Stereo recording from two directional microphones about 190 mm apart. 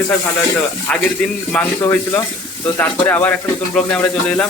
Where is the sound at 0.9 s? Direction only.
5° left (ahead or behind).